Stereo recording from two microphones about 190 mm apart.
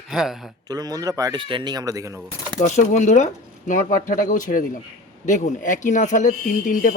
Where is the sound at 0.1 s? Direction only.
Centre (ahead or behind).